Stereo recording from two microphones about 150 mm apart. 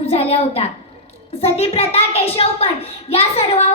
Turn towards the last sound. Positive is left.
turn(degrees=45)  # may be behind; listen again after turning